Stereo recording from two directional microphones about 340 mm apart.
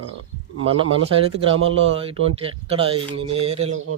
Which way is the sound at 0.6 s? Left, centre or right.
Centre.